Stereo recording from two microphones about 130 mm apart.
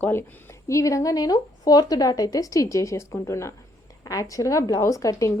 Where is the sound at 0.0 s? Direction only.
20° left (ahead or behind).